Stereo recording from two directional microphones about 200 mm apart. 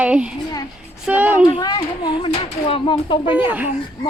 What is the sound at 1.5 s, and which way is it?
Speech, 20° left (ahead or behind).